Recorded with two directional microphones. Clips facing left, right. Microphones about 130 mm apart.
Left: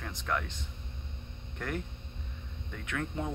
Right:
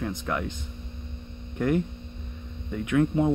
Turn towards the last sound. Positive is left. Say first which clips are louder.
# right 13 dB
turn(degrees=-15)  # may be behind; listen again after turning